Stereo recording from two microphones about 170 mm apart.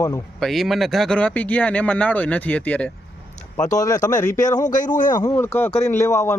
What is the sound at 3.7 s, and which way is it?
Speech, 20° left (ahead or behind).